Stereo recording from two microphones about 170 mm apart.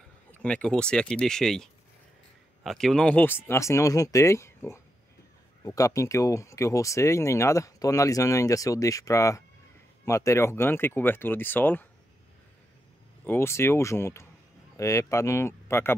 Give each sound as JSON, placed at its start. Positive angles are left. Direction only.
{"t": 0.3, "sound": "speech", "side_deg": 5}
{"t": 13.2, "sound": "speech", "side_deg": 15}